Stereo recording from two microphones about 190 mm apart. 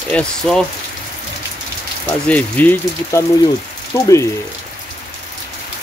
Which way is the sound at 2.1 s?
10° left (ahead or behind).